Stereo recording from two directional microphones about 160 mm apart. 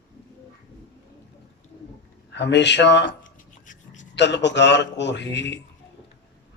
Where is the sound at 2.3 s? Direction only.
90° left.